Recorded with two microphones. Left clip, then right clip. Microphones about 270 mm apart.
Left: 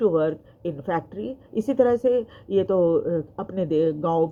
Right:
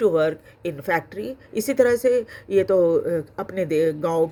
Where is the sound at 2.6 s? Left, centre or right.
Right.